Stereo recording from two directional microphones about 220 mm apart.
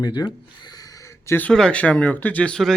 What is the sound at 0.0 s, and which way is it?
Speech, 20° left (ahead or behind).